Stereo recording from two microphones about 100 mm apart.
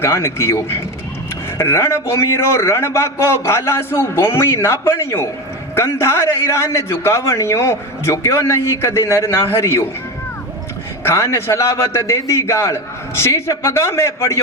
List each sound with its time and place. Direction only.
0.0 s a man's voice: 25° left (ahead or behind)
11.0 s a man's voice: 30° left (ahead or behind)